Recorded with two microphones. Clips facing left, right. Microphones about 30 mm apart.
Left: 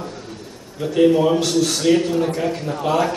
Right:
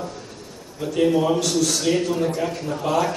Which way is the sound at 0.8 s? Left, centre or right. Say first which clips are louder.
Left 4 dB; left.